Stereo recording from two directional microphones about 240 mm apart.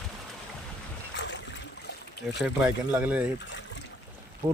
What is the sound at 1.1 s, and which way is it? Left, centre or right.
Boat, left.